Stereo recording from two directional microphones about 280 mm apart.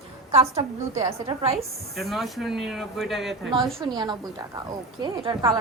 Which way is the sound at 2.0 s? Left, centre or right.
Centre.